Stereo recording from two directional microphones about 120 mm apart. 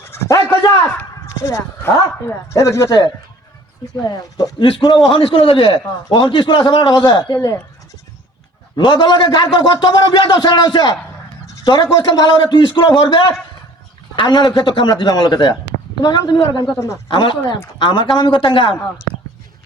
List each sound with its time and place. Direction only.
0.0 s a man's voice: 20° left (ahead or behind); by 7.2 s 40° left (ahead or behind)
7.3 s speech: 25° left (ahead or behind)
8.7 s a man's voice: 40° left (ahead or behind)